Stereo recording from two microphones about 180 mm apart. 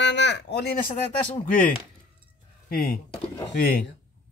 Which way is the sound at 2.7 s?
55° left (ahead or behind).